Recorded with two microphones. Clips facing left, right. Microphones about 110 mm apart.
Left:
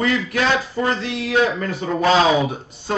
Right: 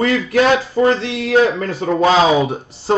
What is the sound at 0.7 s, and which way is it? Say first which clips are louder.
Speech: right 7 dB; 25° right (ahead or behind).